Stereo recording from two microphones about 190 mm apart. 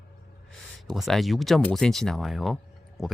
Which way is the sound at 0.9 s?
Centre (ahead or behind).